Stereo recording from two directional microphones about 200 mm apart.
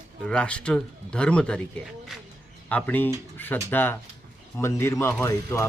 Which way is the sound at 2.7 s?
10° left (ahead or behind).